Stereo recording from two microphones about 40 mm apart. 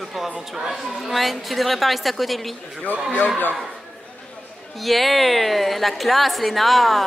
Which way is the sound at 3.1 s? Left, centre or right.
Left.